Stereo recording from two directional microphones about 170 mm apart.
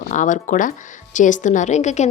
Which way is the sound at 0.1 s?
50° left (ahead or behind).